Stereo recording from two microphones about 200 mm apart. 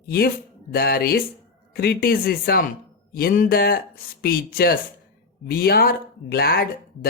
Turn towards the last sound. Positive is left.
turn(degrees=50)  # may be behind; listen again after turning